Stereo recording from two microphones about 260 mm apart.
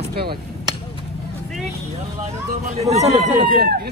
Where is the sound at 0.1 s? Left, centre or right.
Right.